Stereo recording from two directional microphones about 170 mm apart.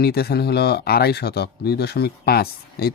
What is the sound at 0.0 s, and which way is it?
Speech, 65° left (ahead or behind).